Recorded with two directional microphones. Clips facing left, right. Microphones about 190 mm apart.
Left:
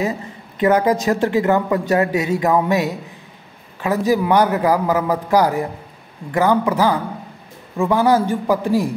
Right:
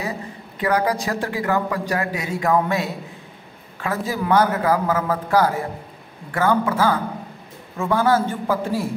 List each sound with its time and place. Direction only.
0.6 s a man's voice: 20° left (ahead or behind)
4.1 s a man's voice: 15° left (ahead or behind)